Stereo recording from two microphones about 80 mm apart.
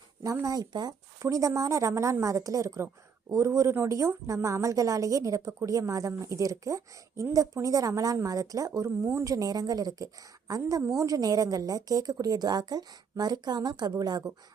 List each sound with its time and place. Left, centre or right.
0.4 s speech: right
1.2 s a woman's voice: right
13.9 s a woman's voice: right